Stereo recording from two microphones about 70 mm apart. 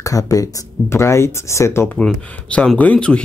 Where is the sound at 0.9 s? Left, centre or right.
Left.